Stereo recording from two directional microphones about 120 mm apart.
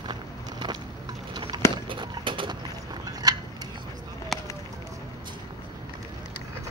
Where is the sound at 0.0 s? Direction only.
35° right (ahead or behind).